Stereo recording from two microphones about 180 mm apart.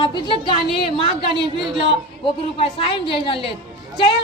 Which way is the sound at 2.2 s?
35° left (ahead or behind).